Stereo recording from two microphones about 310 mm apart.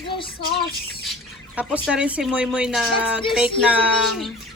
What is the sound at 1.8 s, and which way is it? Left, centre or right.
Speech, centre.